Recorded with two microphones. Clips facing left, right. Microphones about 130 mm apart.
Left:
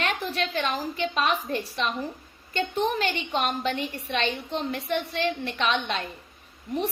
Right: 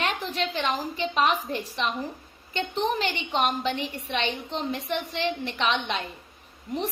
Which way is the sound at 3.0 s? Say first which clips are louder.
Right 1 dB; 15° right (ahead or behind).